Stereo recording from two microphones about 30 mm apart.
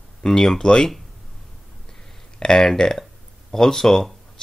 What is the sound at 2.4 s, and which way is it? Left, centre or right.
Speech, left.